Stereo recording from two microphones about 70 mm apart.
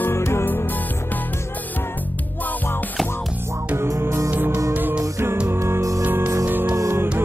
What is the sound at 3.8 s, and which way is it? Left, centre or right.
Music, right.